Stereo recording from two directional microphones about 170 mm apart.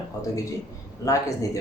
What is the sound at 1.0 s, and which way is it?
Speech, 20° left (ahead or behind).